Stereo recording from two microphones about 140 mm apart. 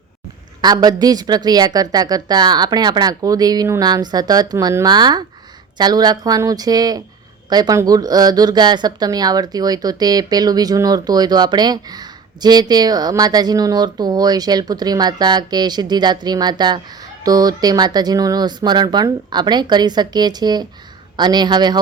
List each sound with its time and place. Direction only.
0.6 s speech: 30° right (ahead or behind)